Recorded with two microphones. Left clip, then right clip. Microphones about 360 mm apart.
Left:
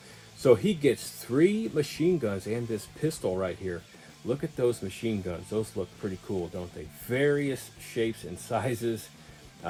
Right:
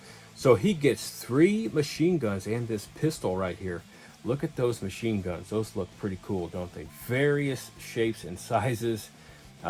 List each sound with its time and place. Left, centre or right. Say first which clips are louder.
0.4 s speech: even; centre
7.1 s speech: even; centre